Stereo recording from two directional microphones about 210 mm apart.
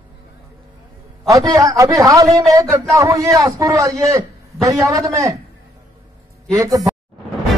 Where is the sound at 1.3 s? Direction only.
15° right (ahead or behind).